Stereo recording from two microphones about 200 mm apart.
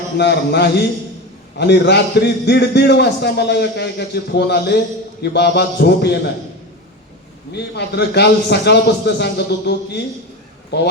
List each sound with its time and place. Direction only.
0.2 s a man's voice: 55° left (ahead or behind)
7.5 s a man's voice: 55° left (ahead or behind)